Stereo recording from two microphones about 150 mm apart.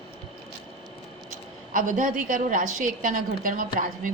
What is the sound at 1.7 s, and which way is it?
A woman's voice, 60° right (ahead or behind).